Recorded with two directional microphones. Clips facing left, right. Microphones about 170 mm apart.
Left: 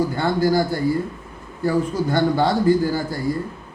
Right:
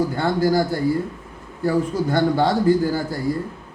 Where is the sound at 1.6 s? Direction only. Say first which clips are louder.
Even; 50° right (ahead or behind).